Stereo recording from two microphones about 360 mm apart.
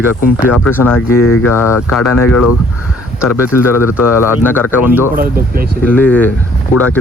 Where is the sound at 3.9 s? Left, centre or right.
Centre.